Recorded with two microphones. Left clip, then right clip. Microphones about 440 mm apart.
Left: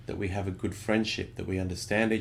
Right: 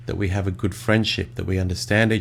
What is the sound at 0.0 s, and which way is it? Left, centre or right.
Speech, right.